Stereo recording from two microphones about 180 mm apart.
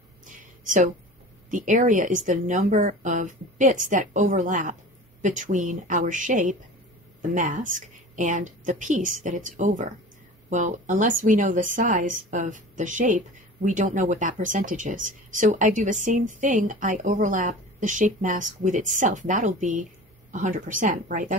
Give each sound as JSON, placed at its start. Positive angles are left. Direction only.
{"t": 1.5, "sound": "speech", "side_deg": -45}